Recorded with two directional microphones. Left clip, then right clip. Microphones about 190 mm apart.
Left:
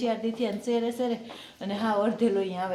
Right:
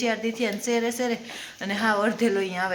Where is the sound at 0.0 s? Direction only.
5° right (ahead or behind).